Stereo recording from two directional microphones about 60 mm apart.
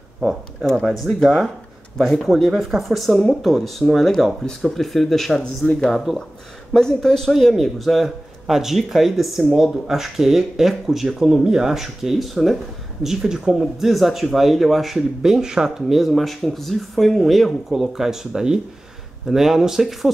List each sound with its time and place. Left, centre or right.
0.2 s speech: centre
0.8 s speech: centre
5.7 s speech: centre
5.9 s speech: centre